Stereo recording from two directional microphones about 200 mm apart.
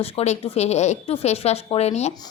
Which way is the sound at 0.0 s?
30° left (ahead or behind).